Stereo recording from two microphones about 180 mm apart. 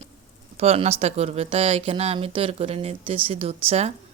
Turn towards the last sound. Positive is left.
turn(degrees=-35)  # may be behind; listen again after turning